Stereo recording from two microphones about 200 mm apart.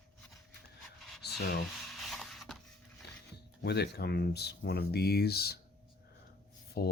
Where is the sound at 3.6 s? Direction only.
55° left (ahead or behind).